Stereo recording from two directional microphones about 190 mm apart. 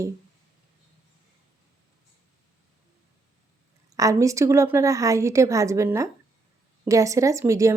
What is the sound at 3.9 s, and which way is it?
A woman's voice, 15° right (ahead or behind).